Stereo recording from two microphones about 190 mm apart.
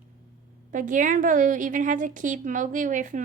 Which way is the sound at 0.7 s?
45° right (ahead or behind).